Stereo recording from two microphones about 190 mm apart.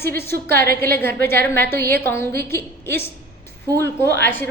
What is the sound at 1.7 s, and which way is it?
Speech, 55° right (ahead or behind).